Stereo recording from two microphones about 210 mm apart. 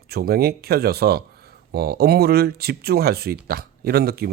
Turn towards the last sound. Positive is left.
turn(degrees=-50)  # may be behind; listen again after turning